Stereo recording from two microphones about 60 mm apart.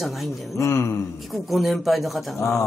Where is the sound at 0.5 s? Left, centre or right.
Left.